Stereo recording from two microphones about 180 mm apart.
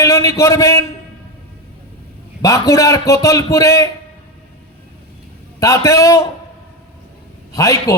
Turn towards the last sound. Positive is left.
turn(degrees=20)  # may be behind; listen again after turning